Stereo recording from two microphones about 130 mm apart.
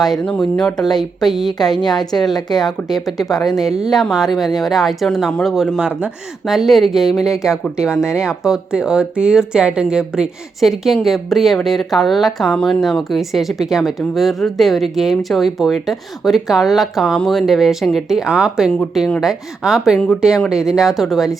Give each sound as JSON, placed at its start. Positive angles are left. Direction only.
{"t": 0.0, "sound": "speech", "side_deg": 5}